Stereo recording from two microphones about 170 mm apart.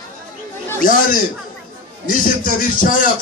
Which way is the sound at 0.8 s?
55° left (ahead or behind).